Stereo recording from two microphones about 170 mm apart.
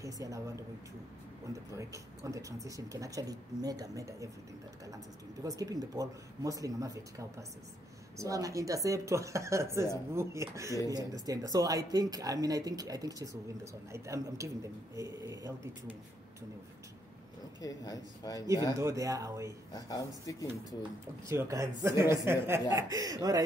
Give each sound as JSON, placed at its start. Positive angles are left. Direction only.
{"t": 0.0, "sound": "speech", "side_deg": -20}
{"t": 1.5, "sound": "speech", "side_deg": -20}
{"t": 5.4, "sound": "speech", "side_deg": -20}
{"t": 17.6, "sound": "speech", "side_deg": 20}
{"t": 18.8, "sound": "speech", "side_deg": -20}
{"t": 19.7, "sound": "speech", "side_deg": 20}
{"t": 21.3, "sound": "speech", "side_deg": -15}